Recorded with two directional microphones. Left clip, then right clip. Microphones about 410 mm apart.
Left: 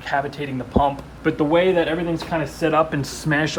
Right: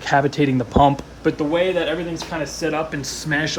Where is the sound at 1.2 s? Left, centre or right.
Centre.